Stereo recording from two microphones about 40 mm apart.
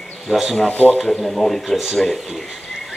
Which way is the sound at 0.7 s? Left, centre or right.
Left.